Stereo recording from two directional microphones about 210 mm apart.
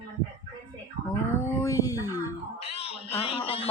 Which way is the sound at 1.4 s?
10° left (ahead or behind).